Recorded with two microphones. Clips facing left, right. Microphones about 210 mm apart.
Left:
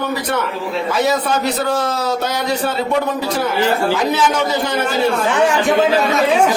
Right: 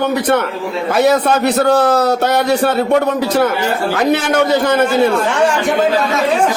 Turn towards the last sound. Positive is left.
turn(degrees=-60)  # may be behind; listen again after turning